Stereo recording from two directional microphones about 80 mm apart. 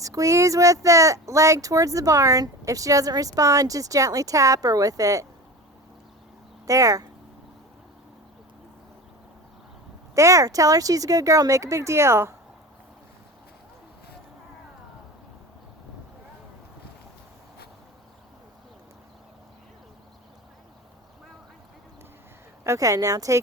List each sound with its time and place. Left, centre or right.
0.0 s speech: right
6.7 s speech: right
10.2 s speech: right
22.6 s speech: right